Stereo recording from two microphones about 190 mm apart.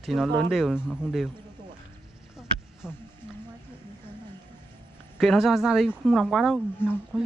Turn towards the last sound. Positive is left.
turn(degrees=10)  # may be behind; listen again after turning